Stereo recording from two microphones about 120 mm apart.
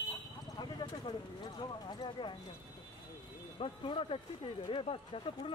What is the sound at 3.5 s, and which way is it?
Speech, 50° left (ahead or behind).